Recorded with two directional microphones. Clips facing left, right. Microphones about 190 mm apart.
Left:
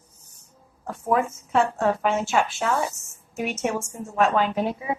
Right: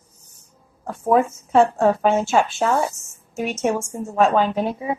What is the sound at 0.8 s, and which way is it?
A woman's voice, 35° right (ahead or behind).